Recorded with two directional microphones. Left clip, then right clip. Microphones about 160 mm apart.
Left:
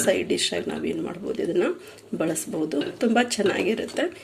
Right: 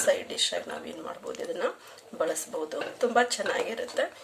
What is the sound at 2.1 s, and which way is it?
Speech, 15° left (ahead or behind).